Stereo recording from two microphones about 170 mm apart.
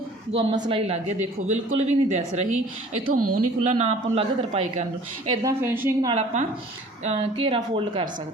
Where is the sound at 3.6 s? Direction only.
40° right (ahead or behind).